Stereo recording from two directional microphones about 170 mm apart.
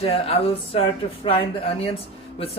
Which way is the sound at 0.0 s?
35° left (ahead or behind).